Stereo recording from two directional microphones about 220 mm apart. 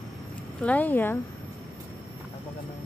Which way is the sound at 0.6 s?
5° left (ahead or behind).